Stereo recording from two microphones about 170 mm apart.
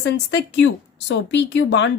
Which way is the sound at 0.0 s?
85° left.